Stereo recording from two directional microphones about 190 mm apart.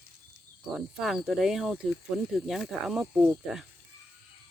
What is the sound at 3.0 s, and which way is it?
Speech, 15° right (ahead or behind).